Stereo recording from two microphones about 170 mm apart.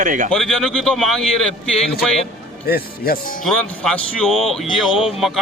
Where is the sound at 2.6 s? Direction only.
65° left (ahead or behind).